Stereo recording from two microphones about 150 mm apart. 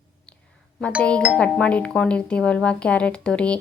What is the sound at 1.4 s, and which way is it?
Speech, 5° left (ahead or behind).